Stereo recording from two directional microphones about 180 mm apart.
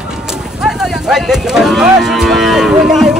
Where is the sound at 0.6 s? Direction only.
5° right (ahead or behind).